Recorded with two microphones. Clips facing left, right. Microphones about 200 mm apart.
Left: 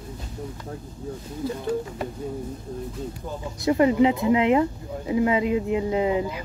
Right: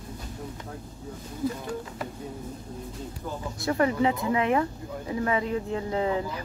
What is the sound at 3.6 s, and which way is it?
Speech, 20° left (ahead or behind).